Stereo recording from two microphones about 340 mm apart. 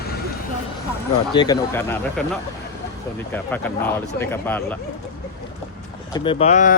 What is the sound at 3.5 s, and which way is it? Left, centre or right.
Speech, centre.